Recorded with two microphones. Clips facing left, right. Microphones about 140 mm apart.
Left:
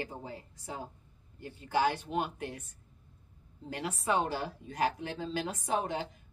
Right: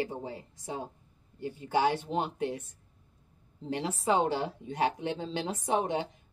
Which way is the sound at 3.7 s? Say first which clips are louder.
Right 3 dB; 25° right (ahead or behind).